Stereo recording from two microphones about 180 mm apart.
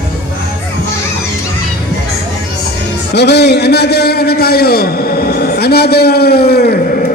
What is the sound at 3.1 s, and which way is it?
A man's voice, 70° left (ahead or behind).